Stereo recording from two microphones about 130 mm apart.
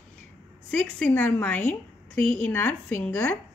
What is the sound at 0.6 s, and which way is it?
A woman's voice, 10° left (ahead or behind).